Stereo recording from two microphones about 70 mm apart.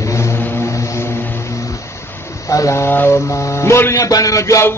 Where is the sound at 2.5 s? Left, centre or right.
Left.